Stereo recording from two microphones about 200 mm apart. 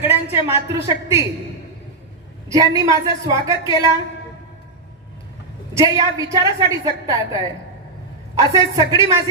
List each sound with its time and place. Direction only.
0.0 s a woman's voice: 10° right (ahead or behind)
2.5 s a woman's voice: 15° right (ahead or behind)
5.7 s a woman's voice: 15° right (ahead or behind)
8.4 s a woman's voice: 20° right (ahead or behind)